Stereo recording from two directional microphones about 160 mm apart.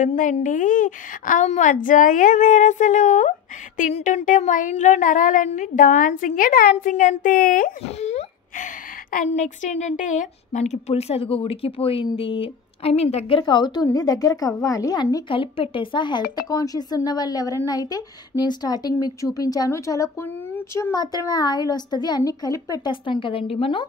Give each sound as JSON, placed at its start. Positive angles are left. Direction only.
{"t": 0.0, "sound": "a woman's voice", "side_deg": 55}
{"t": 13.4, "sound": "speech", "side_deg": 30}